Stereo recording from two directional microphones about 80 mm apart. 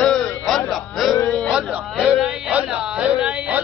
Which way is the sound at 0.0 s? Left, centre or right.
Centre.